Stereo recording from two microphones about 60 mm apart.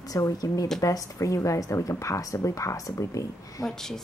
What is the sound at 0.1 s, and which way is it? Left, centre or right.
Speech, left.